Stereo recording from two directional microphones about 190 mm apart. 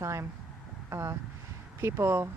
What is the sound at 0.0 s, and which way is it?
Speech, 15° right (ahead or behind).